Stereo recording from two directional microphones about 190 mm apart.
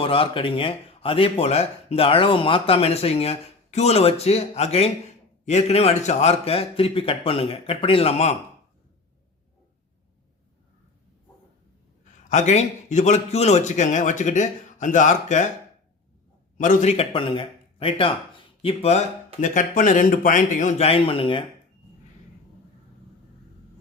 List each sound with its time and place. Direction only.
0.0 s speech: 30° left (ahead or behind)
12.3 s speech: 35° left (ahead or behind)
16.6 s speech: 40° left (ahead or behind)